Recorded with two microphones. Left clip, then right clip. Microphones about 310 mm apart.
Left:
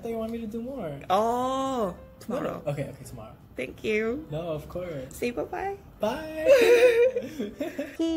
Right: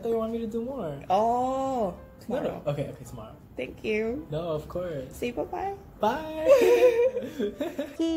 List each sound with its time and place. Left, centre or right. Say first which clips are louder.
0.0 s speech: right 4 dB; centre
1.0 s speech: even; left
2.3 s speech: right 1 dB; centre
3.5 s speech: left 1 dB; left
4.3 s speech: right 2 dB; centre
5.2 s speech: left 1 dB; left
5.9 s speech: right 3 dB; centre
6.6 s speech: left 2 dB; left
7.3 s speech: right 2 dB; centre